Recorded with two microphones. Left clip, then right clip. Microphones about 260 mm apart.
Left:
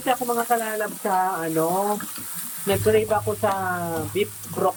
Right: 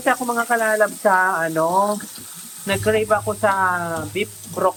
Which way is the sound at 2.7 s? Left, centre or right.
Centre.